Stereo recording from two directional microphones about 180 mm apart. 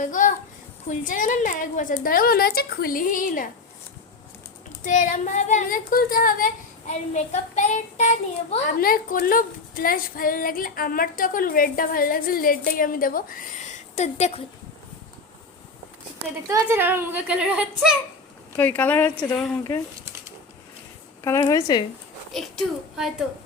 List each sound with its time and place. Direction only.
0.0 s a woman's voice: 45° left (ahead or behind)
4.8 s a woman's voice: 45° left (ahead or behind)
8.6 s a woman's voice: 55° left (ahead or behind); by 14.4 s 35° left (ahead or behind)
16.5 s a woman's voice: 15° right (ahead or behind)
18.5 s a woman's voice: 10° left (ahead or behind)
21.2 s a woman's voice: 15° left (ahead or behind)
22.3 s a woman's voice: centre (ahead or behind)